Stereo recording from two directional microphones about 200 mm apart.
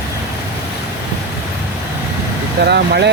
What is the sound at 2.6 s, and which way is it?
Speech, 55° right (ahead or behind).